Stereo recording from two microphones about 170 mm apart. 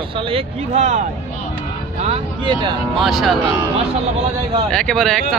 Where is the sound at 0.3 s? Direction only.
40° right (ahead or behind).